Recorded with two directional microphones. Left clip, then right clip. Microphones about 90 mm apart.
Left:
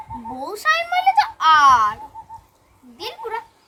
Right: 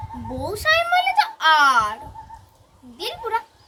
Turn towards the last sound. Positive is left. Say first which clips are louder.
# right 3 dB
turn(degrees=35)  # may be behind; listen again after turning